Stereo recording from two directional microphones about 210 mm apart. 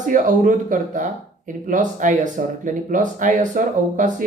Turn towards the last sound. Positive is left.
turn(degrees=-40)  # may be behind; listen again after turning